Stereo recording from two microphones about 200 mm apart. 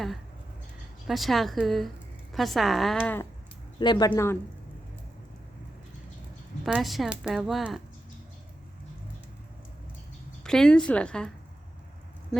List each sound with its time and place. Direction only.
1.0 s speech: centre (ahead or behind)
3.8 s speech: 20° left (ahead or behind)
6.7 s speech: centre (ahead or behind)
10.4 s speech: 5° left (ahead or behind)